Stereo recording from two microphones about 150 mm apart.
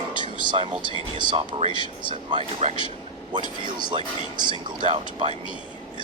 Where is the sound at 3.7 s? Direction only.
30° right (ahead or behind).